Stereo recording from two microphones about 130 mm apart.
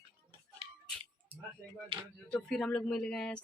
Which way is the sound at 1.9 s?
45° right (ahead or behind).